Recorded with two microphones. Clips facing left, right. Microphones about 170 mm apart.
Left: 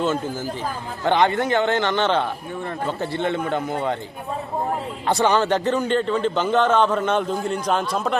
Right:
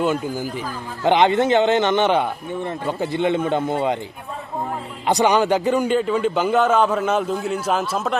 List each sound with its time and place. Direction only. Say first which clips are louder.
0.0 s a man's voice: right 2 dB; 15° right (ahead or behind)
5.0 s a man's voice: right 2 dB; 15° right (ahead or behind)